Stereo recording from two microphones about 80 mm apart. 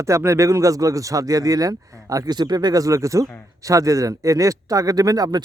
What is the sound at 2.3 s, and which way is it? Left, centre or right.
Speech, right.